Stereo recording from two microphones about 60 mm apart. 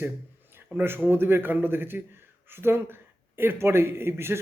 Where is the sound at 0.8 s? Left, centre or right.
Right.